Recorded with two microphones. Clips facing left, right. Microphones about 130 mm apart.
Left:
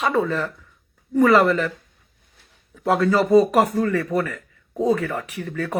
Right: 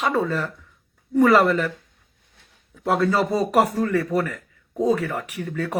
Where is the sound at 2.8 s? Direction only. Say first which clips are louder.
Left 2 dB; centre (ahead or behind).